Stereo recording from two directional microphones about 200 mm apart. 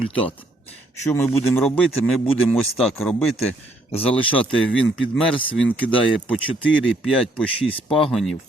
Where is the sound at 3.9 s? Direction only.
30° left (ahead or behind).